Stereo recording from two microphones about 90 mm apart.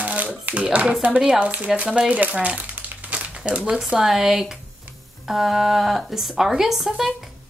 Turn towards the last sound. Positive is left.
turn(degrees=-5)  # may be behind; listen again after turning